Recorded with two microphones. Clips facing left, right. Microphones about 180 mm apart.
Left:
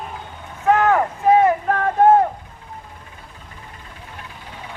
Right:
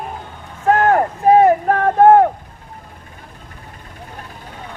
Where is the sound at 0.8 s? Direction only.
45° right (ahead or behind); by 2.3 s 60° right (ahead or behind).